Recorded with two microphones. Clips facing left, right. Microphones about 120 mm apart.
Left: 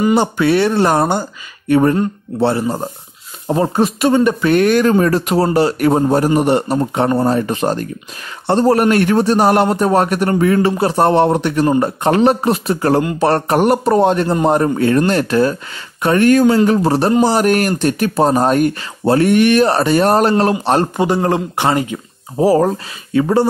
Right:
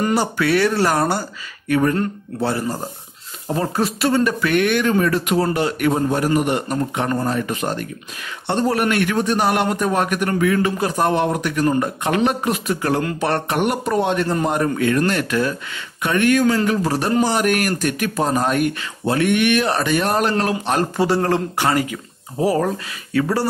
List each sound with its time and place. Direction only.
0.1 s speech: 25° left (ahead or behind)
20.9 s speech: 15° left (ahead or behind); by 23.2 s 30° left (ahead or behind)
23.2 s speech: 20° left (ahead or behind)